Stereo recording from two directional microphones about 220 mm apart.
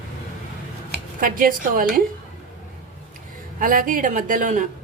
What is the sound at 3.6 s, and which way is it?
Speech, 40° right (ahead or behind).